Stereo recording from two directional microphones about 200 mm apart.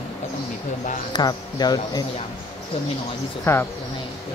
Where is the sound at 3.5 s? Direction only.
10° left (ahead or behind).